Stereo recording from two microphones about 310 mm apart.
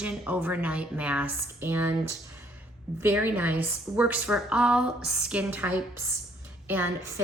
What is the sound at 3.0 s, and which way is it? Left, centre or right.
A woman's voice, centre.